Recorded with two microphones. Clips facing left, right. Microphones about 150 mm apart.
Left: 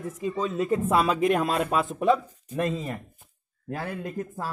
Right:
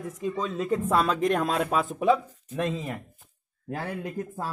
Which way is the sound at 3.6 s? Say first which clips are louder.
Even; 15° right (ahead or behind).